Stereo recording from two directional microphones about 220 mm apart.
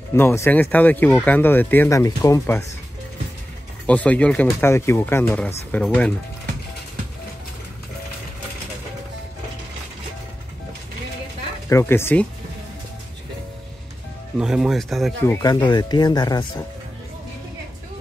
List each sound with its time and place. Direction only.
0.1 s speech: 10° left (ahead or behind)
3.8 s speech: 5° left (ahead or behind)
11.7 s speech: 10° left (ahead or behind)
14.4 s speech: centre (ahead or behind)
15.2 s speech: 15° left (ahead or behind)